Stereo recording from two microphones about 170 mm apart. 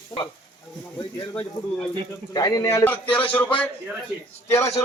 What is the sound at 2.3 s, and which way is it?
A man's voice, 20° left (ahead or behind).